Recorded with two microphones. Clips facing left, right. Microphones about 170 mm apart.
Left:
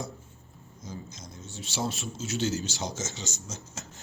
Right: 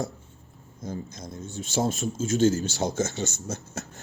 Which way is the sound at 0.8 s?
55° right (ahead or behind).